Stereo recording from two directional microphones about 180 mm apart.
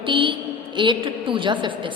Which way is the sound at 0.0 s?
25° right (ahead or behind).